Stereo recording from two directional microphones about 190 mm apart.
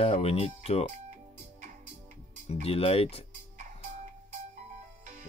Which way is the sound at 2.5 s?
30° left (ahead or behind).